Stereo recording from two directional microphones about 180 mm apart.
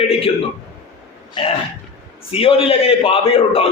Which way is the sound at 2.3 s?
30° left (ahead or behind).